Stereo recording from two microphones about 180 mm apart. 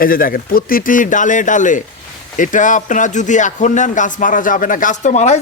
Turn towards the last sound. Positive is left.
turn(degrees=40)  # may be behind; listen again after turning